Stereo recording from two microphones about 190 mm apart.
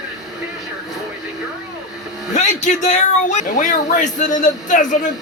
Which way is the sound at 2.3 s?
40° left (ahead or behind).